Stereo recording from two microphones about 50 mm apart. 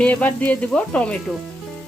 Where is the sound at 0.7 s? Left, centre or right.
Left.